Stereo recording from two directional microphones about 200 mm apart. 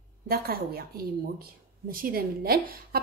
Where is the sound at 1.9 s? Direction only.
45° right (ahead or behind).